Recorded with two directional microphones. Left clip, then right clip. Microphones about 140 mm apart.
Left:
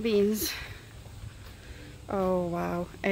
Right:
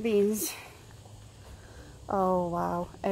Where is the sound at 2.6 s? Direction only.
25° left (ahead or behind).